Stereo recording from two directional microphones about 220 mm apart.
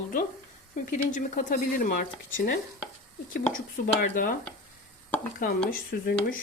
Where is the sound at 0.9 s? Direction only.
35° left (ahead or behind).